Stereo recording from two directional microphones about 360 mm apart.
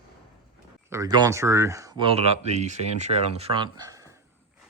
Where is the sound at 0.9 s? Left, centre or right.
Centre.